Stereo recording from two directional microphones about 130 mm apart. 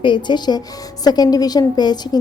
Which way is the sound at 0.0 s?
35° left (ahead or behind).